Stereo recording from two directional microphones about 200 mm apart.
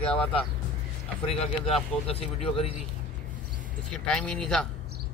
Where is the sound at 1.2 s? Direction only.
30° left (ahead or behind).